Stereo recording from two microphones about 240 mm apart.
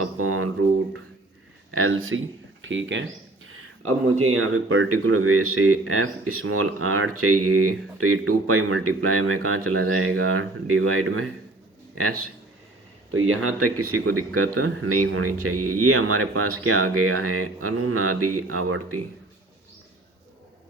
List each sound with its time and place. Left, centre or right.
0.0 s a sound: right
1.7 s speech: right
13.1 s speech: right